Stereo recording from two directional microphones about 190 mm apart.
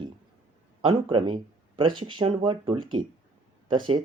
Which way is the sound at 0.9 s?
25° right (ahead or behind).